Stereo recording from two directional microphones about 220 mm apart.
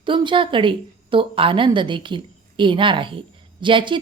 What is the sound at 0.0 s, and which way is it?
A woman's voice, 20° right (ahead or behind).